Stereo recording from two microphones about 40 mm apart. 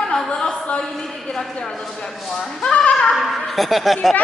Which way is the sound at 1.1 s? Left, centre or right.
Centre.